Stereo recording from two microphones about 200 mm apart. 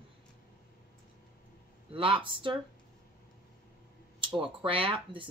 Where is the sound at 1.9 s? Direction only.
25° right (ahead or behind).